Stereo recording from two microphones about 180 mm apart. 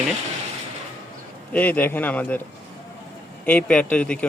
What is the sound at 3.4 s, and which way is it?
Speech, 10° left (ahead or behind).